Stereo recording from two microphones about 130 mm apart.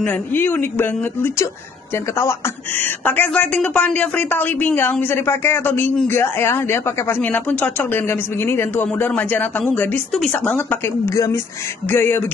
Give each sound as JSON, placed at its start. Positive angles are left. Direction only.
{"t": 0.0, "sound": "speech", "side_deg": 15}
{"t": 2.8, "sound": "speech", "side_deg": 15}
{"t": 11.9, "sound": "speech", "side_deg": 15}